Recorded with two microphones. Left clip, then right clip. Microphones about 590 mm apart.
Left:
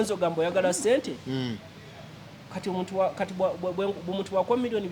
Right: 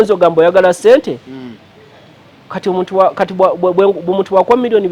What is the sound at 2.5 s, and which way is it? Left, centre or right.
Speech, right.